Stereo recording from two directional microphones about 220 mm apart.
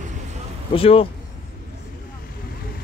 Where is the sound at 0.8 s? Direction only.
25° left (ahead or behind).